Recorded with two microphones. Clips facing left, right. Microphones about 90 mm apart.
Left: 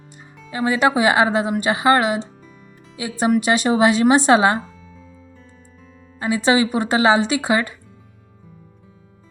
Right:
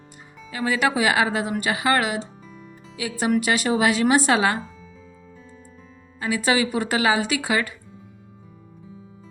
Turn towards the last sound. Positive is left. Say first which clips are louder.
# left 4 dB
turn(degrees=25)  # may be behind; listen again after turning